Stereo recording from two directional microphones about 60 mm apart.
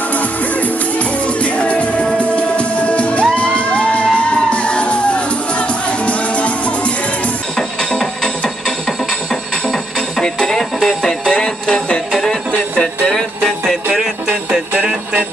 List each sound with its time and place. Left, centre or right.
0.1 s music: left
7.5 s music: centre
14.7 s music: right